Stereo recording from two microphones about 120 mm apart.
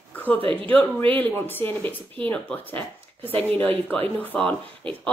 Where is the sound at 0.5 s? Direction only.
15° left (ahead or behind).